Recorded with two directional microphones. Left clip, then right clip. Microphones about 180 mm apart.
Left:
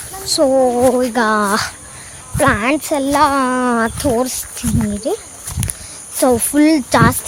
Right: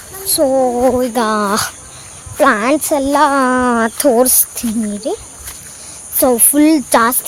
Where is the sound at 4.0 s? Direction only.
40° right (ahead or behind).